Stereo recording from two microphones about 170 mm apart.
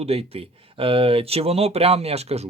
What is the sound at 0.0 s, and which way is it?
Speech, 35° right (ahead or behind).